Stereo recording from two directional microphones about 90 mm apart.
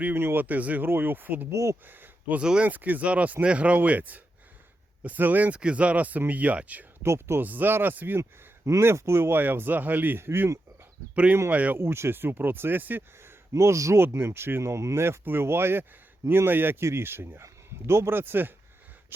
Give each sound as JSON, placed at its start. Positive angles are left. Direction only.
{"t": 0.0, "sound": "speech", "side_deg": -25}
{"t": 7.0, "sound": "speech", "side_deg": -30}
{"t": 11.8, "sound": "speech", "side_deg": -25}
{"t": 13.5, "sound": "speech", "side_deg": -35}